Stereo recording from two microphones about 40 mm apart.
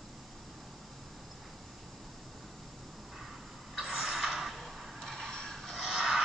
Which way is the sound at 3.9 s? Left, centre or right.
Centre.